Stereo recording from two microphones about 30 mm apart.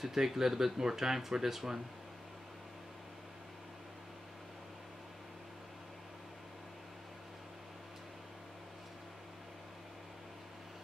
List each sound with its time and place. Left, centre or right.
0.0 s speech: centre